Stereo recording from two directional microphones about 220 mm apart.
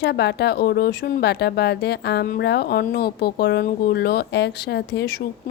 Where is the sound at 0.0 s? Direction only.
50° left (ahead or behind).